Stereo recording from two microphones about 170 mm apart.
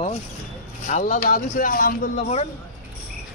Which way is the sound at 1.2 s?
55° left (ahead or behind).